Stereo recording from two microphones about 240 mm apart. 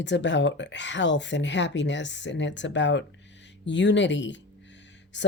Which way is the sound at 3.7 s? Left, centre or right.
Left.